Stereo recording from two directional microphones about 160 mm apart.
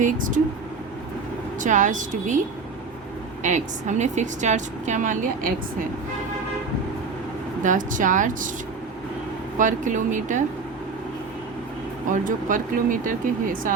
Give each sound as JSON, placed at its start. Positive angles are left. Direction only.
{"t": 0.0, "sound": "speech", "side_deg": -55}
{"t": 1.6, "sound": "a woman's voice", "side_deg": -55}
{"t": 3.4, "sound": "a woman's voice", "side_deg": -50}
{"t": 7.6, "sound": "speech", "side_deg": -55}
{"t": 9.6, "sound": "a woman's voice", "side_deg": -50}
{"t": 12.1, "sound": "speech", "side_deg": -55}